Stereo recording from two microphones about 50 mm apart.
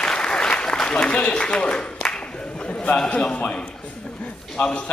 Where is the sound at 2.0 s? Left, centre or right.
Centre.